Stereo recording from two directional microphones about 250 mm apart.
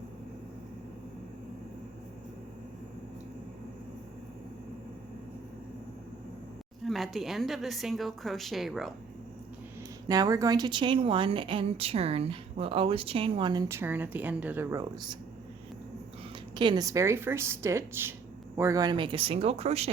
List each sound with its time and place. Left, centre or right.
6.8 s a woman's voice: centre
10.1 s speech: centre
16.6 s speech: centre